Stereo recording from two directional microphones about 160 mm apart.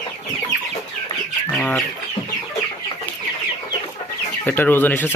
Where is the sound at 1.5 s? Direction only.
5° left (ahead or behind).